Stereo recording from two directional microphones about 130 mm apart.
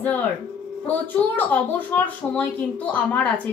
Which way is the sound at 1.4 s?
10° left (ahead or behind).